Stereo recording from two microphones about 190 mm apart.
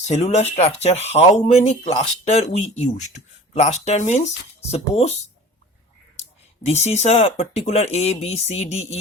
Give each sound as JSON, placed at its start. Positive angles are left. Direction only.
{"t": 0.1, "sound": "speech", "side_deg": 35}
{"t": 6.7, "sound": "speech", "side_deg": 35}